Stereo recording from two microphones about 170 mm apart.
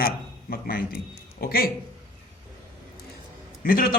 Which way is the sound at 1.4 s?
60° left (ahead or behind).